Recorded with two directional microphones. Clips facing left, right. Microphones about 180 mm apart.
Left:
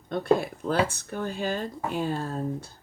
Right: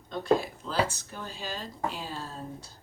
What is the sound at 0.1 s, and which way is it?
Speech, 55° left (ahead or behind).